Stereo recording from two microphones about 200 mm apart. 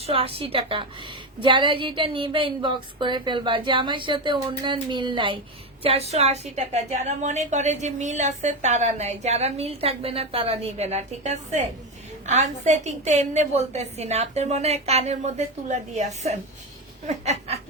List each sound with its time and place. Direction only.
0.0 s a woman's voice: 30° right (ahead or behind)